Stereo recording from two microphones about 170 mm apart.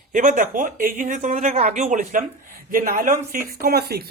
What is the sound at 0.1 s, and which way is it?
Speech, 50° right (ahead or behind).